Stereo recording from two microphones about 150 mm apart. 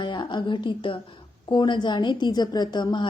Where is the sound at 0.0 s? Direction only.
30° left (ahead or behind).